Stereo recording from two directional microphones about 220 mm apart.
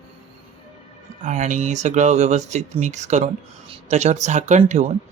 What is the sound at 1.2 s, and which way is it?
Speech, 35° right (ahead or behind).